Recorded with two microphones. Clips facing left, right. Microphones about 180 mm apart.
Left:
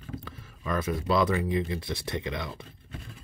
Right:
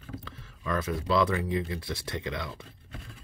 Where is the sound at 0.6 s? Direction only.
15° left (ahead or behind).